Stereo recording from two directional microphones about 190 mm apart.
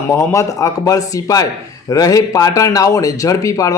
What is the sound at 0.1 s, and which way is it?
Speech, 15° left (ahead or behind).